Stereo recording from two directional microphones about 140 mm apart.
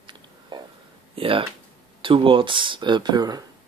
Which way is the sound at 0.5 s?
35° right (ahead or behind).